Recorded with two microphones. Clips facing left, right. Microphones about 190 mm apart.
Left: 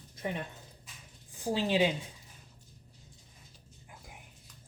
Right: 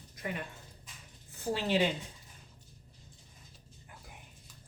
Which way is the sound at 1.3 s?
15° left (ahead or behind).